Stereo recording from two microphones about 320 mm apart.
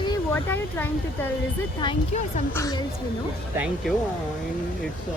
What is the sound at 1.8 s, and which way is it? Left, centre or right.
Speech, centre.